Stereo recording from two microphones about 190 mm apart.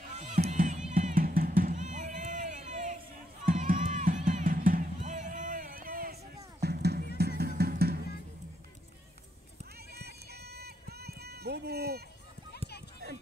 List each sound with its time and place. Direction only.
0.1 s music: 40° right (ahead or behind); by 8.0 s 55° right (ahead or behind)
9.8 s run: 55° right (ahead or behind)
12.5 s a sound: 60° left (ahead or behind)